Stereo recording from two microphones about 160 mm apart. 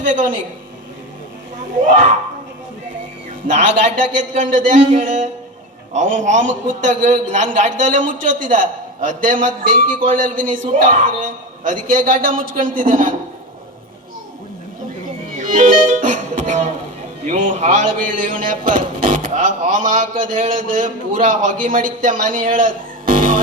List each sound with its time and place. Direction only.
0.0 s a woman's voice: 50° right (ahead or behind)
1.8 s a man's voice: 50° right (ahead or behind)
3.4 s a man's voice: 50° right (ahead or behind)
15.4 s music: 50° right (ahead or behind)
17.2 s a man's voice: 50° right (ahead or behind)